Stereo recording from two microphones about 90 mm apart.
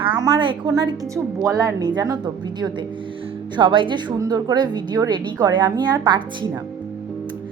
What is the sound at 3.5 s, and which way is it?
Speech, 65° right (ahead or behind).